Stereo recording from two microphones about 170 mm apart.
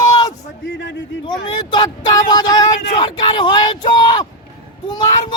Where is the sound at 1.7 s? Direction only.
25° left (ahead or behind).